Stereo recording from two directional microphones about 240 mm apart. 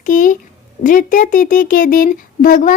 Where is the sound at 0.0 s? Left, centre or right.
Left.